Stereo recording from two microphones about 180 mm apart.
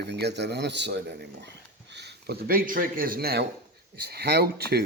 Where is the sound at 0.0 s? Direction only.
70° right (ahead or behind).